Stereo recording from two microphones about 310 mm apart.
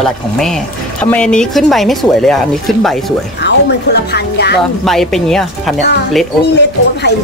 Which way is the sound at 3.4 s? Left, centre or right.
Left.